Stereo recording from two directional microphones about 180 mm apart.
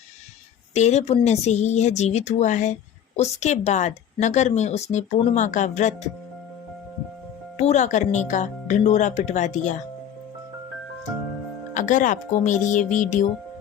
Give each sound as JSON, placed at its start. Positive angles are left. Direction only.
{"t": 0.7, "sound": "speech", "side_deg": 40}
{"t": 7.5, "sound": "speech", "side_deg": 40}
{"t": 11.7, "sound": "speech", "side_deg": 45}